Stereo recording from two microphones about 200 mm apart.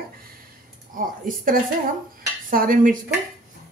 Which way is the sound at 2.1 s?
45° right (ahead or behind).